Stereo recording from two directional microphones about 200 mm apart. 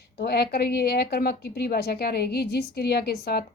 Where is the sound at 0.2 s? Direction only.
55° left (ahead or behind).